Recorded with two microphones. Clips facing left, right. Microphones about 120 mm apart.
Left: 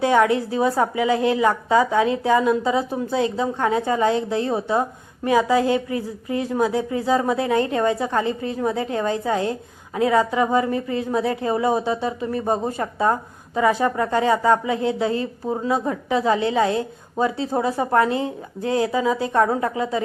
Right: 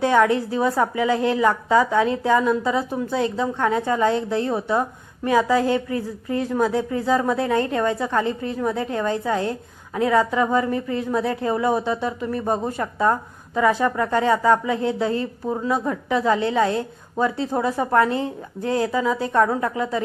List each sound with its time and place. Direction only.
0.0 s a woman's voice: 25° left (ahead or behind)